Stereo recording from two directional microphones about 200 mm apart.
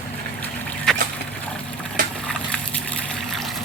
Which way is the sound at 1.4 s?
5° left (ahead or behind).